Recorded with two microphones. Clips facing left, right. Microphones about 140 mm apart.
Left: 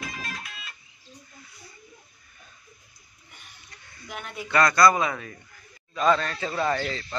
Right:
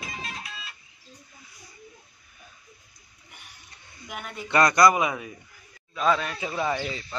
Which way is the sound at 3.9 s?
10° right (ahead or behind).